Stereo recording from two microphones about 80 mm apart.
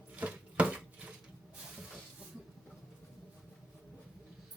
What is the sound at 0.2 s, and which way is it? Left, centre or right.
Chopping, centre.